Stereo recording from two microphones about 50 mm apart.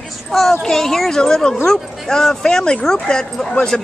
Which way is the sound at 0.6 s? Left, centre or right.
Centre.